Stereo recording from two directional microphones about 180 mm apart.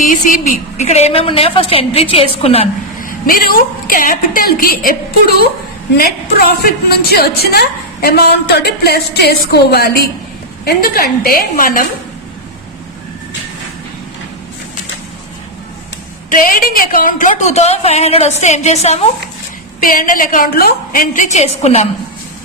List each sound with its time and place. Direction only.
0.0 s a woman's voice: 45° left (ahead or behind)
3.0 s a woman's voice: 55° left (ahead or behind)
16.3 s a woman's voice: 55° left (ahead or behind); by 19.0 s 35° left (ahead or behind)
19.8 s a woman's voice: 50° left (ahead or behind); by 21.8 s 35° left (ahead or behind)